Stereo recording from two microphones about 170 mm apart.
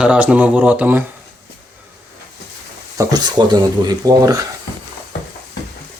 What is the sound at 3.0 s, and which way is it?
Speech, 25° right (ahead or behind).